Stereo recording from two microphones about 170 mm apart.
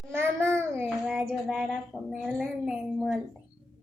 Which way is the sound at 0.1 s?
15° right (ahead or behind).